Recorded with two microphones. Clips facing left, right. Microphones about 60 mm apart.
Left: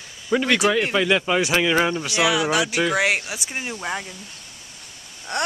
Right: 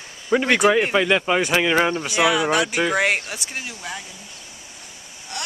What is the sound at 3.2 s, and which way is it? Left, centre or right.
Speech, centre.